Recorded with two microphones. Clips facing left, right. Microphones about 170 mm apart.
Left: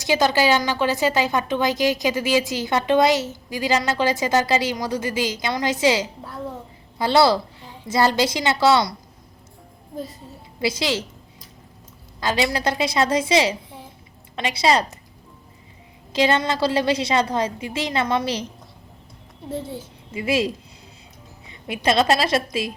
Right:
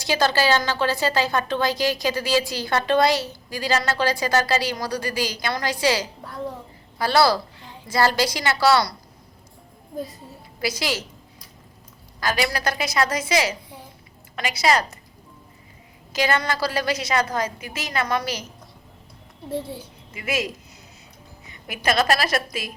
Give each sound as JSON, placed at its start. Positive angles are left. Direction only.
{"t": 0.0, "sound": "a woman's voice", "side_deg": 20}
{"t": 10.6, "sound": "a woman's voice", "side_deg": 25}
{"t": 12.2, "sound": "a woman's voice", "side_deg": 25}
{"t": 16.1, "sound": "a woman's voice", "side_deg": 25}
{"t": 20.1, "sound": "a woman's voice", "side_deg": 30}